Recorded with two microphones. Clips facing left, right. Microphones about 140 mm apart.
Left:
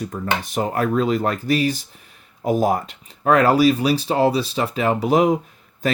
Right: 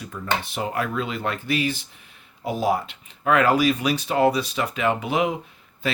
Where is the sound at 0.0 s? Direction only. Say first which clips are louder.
Left 3 dB; 40° left (ahead or behind).